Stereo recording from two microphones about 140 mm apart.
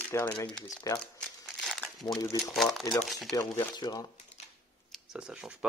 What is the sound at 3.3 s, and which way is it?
Speech, 25° left (ahead or behind).